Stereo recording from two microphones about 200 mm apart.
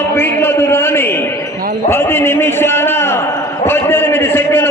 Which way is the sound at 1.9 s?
10° left (ahead or behind).